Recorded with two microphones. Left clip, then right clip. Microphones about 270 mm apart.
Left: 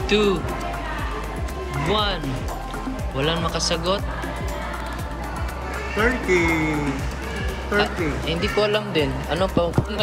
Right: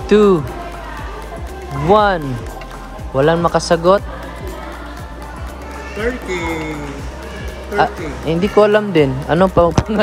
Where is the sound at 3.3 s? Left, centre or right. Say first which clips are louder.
Right 9 dB; centre.